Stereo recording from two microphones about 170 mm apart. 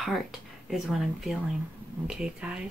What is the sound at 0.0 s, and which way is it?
Speech, centre (ahead or behind).